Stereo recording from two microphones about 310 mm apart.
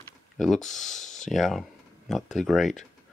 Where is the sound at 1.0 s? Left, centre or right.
Left.